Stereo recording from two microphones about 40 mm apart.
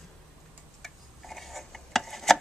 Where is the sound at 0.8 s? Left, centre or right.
Centre.